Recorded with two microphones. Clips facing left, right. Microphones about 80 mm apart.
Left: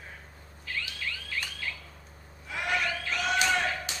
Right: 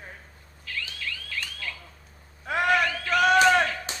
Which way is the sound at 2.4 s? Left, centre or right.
Right.